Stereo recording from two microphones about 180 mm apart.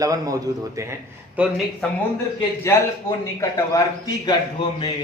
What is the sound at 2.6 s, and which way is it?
A man's voice, 15° left (ahead or behind).